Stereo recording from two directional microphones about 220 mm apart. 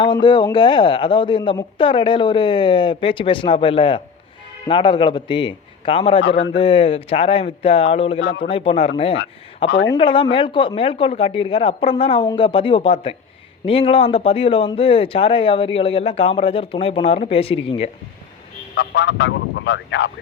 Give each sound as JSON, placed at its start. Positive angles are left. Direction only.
{"t": 0.0, "sound": "speech", "side_deg": 20}
{"t": 6.2, "sound": "a man's voice", "side_deg": 55}
{"t": 6.5, "sound": "speech", "side_deg": 25}
{"t": 9.6, "sound": "speech", "side_deg": 50}
{"t": 9.9, "sound": "speech", "side_deg": 20}
{"t": 18.7, "sound": "speech", "side_deg": 50}